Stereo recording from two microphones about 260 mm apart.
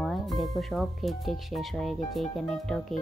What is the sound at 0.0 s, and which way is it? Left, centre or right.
Speech, centre.